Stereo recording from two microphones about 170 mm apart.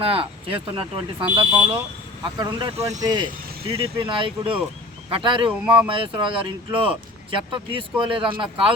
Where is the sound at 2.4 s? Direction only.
30° right (ahead or behind).